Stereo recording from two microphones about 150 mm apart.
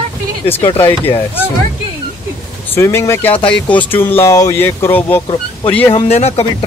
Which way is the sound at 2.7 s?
20° left (ahead or behind).